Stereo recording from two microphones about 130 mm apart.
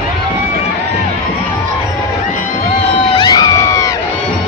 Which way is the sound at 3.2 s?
30° left (ahead or behind).